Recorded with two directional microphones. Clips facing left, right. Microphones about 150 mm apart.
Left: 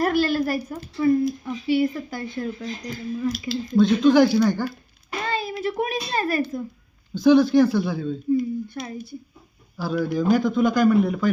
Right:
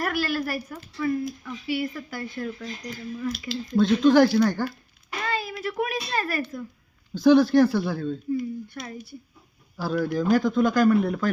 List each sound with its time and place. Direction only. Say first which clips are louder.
0.0 s a sound: left 6 dB; 25° left (ahead or behind)
1.5 s speech: left 7 dB; 25° left (ahead or behind)
3.5 s a man's voice: left 3 dB; 5° left (ahead or behind)
5.2 s hands: left 3 dB; 25° left (ahead or behind)
7.1 s a man's voice: left 1 dB; centre (ahead or behind)
8.7 s speech: left 4 dB; 20° left (ahead or behind)
9.7 s a man's voice: left 1 dB; centre (ahead or behind)